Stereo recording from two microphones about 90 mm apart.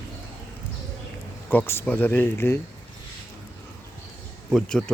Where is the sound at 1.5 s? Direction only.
25° left (ahead or behind).